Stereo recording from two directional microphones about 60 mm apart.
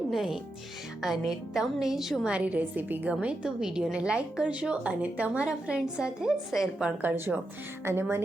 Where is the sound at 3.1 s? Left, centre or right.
Centre.